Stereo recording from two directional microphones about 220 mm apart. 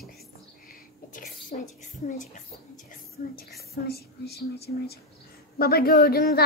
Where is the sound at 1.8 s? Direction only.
35° left (ahead or behind).